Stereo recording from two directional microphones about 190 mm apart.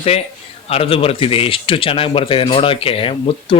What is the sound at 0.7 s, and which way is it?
Speech, 30° left (ahead or behind).